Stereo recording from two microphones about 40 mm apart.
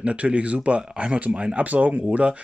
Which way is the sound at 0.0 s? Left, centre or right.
Right.